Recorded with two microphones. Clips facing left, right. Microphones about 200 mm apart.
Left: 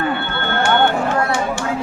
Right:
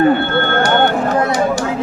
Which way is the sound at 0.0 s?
45° right (ahead or behind).